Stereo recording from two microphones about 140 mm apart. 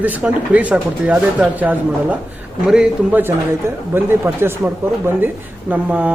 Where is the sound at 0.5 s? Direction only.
10° right (ahead or behind).